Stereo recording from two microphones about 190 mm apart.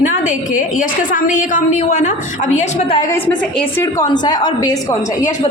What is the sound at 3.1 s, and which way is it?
Speech, 5° left (ahead or behind).